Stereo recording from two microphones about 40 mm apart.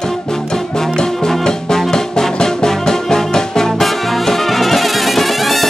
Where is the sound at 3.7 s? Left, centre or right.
Centre.